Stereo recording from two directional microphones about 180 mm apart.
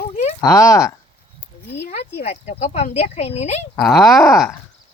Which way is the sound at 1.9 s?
35° left (ahead or behind).